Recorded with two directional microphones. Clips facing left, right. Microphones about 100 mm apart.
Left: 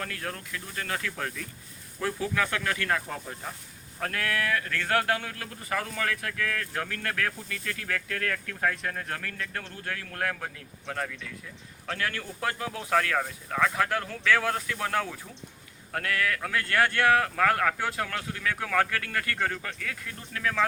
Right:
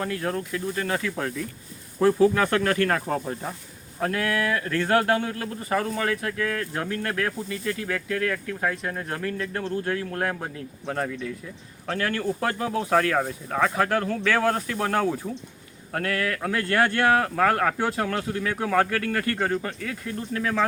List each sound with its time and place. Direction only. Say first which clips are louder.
0.0 s speech: right 8 dB; 25° right (ahead or behind); by 3.5 s 45° right (ahead or behind)
4.0 s speech: right 5 dB; 20° right (ahead or behind)